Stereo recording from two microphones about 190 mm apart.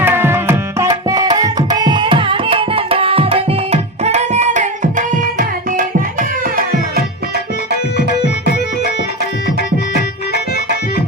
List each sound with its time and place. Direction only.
0.0 s tabla: 10° right (ahead or behind); by 6.5 s 45° right (ahead or behind)
7.7 s music: 60° left (ahead or behind)
9.9 s music: 55° left (ahead or behind)